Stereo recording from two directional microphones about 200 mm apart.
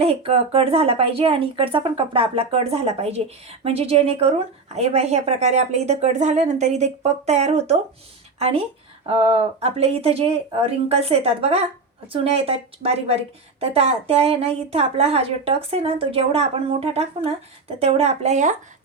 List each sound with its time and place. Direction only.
0.0 s a woman's voice: 30° right (ahead or behind)